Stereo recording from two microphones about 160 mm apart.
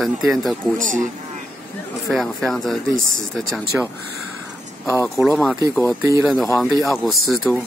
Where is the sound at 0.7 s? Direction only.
55° right (ahead or behind).